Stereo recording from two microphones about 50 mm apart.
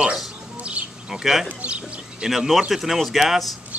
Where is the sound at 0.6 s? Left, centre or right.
Right.